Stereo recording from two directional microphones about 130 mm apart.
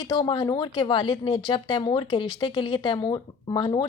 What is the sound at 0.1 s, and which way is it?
Speech, 35° left (ahead or behind).